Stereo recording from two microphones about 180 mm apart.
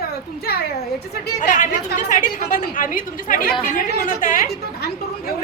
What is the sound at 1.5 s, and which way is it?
A woman's voice, 45° left (ahead or behind).